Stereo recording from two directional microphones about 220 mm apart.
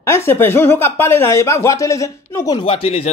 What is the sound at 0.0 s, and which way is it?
Speech, 10° left (ahead or behind).